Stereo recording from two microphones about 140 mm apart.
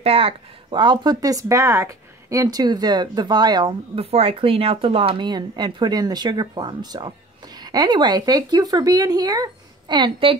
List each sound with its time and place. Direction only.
0.0 s speech: 40° right (ahead or behind)